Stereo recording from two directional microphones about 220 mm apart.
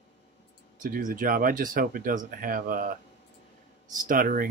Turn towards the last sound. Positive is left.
turn(degrees=-40)  # may be behind; listen again after turning